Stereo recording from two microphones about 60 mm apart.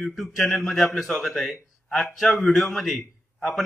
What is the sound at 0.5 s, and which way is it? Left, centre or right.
A man's voice, centre.